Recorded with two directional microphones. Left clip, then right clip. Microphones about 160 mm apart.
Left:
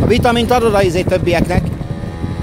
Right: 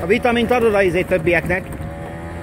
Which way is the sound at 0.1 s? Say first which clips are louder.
Left 2 dB; 25° left (ahead or behind).